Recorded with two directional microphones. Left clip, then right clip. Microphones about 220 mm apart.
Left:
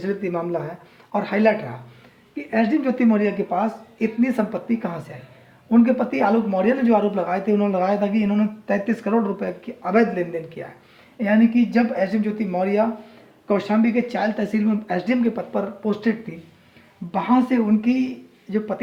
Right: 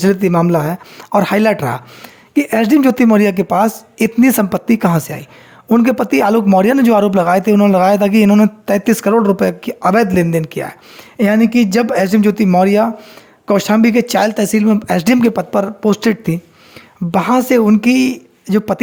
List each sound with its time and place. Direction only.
0.0 s speech: 55° right (ahead or behind)